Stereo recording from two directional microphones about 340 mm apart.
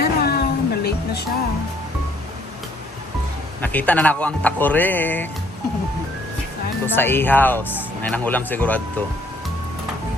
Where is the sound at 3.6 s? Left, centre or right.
Centre.